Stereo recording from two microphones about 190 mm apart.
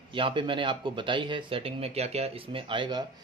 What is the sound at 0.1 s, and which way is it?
Speech, 25° right (ahead or behind).